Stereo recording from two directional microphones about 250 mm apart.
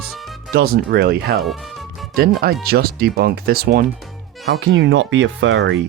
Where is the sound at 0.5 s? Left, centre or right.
Right.